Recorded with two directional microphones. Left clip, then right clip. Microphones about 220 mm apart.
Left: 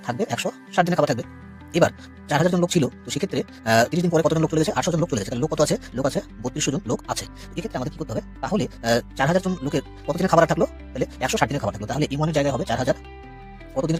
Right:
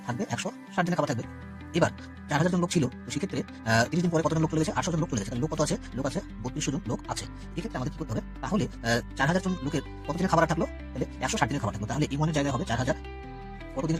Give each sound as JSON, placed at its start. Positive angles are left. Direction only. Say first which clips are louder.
{"t": 0.0, "sound": "speech", "louder": "left 8 dB", "side_deg": 45}
{"t": 2.3, "sound": "speech", "louder": "left 7 dB", "side_deg": 40}